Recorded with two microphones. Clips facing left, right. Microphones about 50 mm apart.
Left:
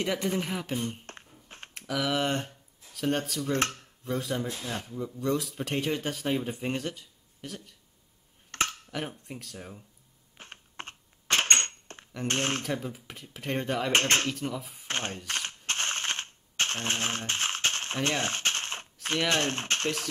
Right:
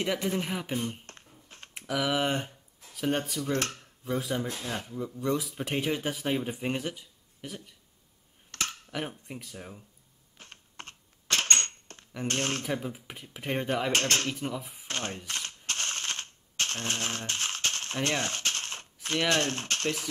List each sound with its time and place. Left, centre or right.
0.0 s speech: centre
1.0 s a sound: left
1.7 s speech: centre
8.5 s a sound: left
8.9 s speech: centre
10.3 s camera: left
12.3 s speech: left
12.6 s speech: centre
13.9 s speech: left
14.3 s speech: centre
14.9 s a sound: left
15.2 s mechanisms: left
19.2 s speech: left